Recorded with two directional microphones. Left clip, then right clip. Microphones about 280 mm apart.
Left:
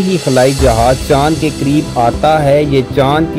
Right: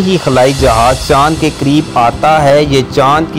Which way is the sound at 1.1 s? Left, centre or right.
Centre.